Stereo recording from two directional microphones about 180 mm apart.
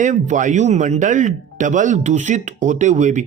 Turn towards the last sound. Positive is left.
turn(degrees=-40)  # may be behind; listen again after turning